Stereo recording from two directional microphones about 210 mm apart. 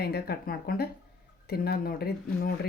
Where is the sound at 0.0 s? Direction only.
50° left (ahead or behind).